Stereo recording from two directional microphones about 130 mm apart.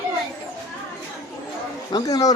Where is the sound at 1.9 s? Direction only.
30° left (ahead or behind).